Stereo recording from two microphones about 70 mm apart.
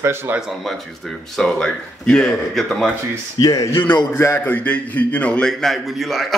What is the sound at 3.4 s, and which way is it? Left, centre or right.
Speech, left.